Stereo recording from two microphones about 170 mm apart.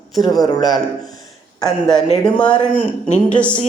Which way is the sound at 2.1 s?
5° left (ahead or behind).